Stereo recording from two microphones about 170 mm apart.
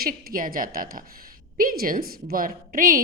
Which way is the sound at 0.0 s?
60° right (ahead or behind).